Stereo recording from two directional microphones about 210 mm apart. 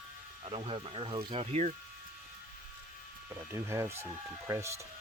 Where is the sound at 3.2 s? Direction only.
10° right (ahead or behind).